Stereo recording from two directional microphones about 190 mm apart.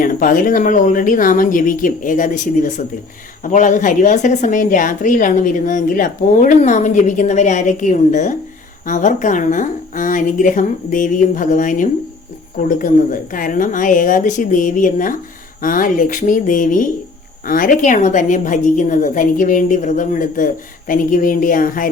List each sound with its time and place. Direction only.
0.0 s a woman's voice: 45° left (ahead or behind)